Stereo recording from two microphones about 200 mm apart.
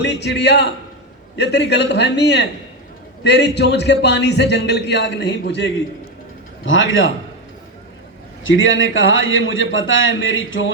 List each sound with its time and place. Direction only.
0.0 s a man's voice: 60° left (ahead or behind)
6.7 s a man's voice: 70° left (ahead or behind)
8.4 s a man's voice: 75° left (ahead or behind)